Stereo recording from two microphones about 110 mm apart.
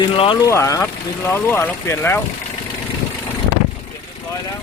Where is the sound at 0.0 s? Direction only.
50° left (ahead or behind).